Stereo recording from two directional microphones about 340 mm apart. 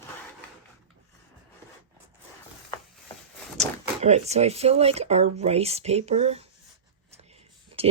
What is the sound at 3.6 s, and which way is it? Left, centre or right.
Speech, centre.